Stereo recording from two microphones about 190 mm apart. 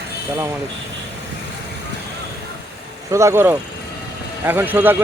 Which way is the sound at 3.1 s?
15° right (ahead or behind).